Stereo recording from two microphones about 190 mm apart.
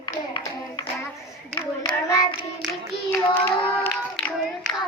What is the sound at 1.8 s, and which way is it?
Hands, 20° left (ahead or behind).